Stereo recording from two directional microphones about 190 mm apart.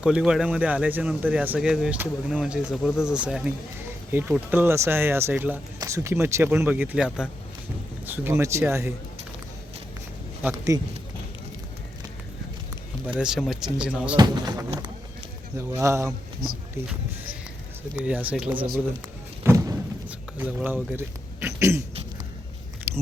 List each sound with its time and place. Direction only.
0.0 s speech: 5° right (ahead or behind)
10.5 s speech: 15° right (ahead or behind)
13.1 s speech: 5° right (ahead or behind)
14.2 s speech: 20° right (ahead or behind)
18.0 s speech: 10° right (ahead or behind)
19.5 s thump: 15° right (ahead or behind)
20.1 s speech: 10° right (ahead or behind)
21.4 s a sound: 15° right (ahead or behind)
22.9 s a sound: 10° right (ahead or behind)